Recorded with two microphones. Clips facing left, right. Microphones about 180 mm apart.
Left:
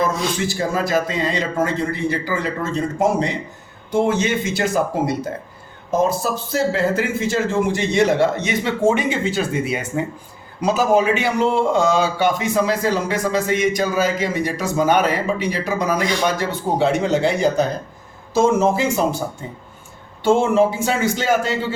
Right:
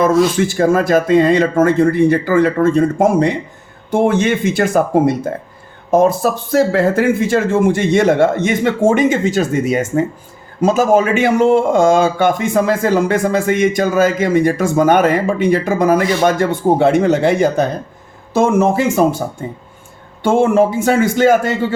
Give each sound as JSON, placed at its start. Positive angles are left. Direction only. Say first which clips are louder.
{"t": 0.1, "sound": "speech", "louder": "right 11 dB", "side_deg": 0}
{"t": 0.4, "sound": "a man's voice", "louder": "right 8 dB", "side_deg": -55}
{"t": 20.2, "sound": "a man's voice", "louder": "right 3 dB", "side_deg": -55}